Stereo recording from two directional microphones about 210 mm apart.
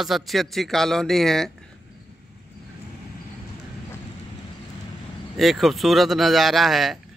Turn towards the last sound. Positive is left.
turn(degrees=0)  # may be behind; listen again after turning